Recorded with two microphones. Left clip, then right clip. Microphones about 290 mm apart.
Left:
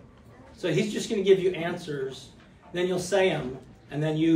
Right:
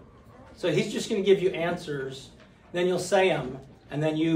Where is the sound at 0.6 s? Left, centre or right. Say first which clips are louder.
Right 1 dB; centre.